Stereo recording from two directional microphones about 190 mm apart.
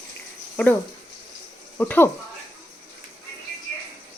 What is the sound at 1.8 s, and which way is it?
Speech, 10° left (ahead or behind).